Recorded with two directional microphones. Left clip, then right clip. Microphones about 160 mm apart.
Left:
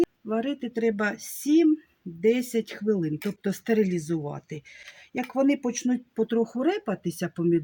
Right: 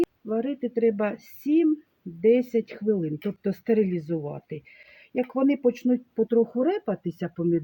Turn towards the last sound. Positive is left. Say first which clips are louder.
# left 1 dB
turn(degrees=30)  # may be behind; listen again after turning